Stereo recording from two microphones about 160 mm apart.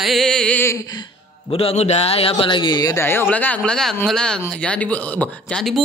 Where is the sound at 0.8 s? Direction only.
25° left (ahead or behind).